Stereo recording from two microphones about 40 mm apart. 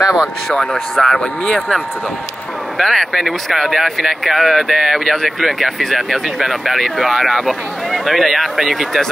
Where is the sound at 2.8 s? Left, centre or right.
Centre.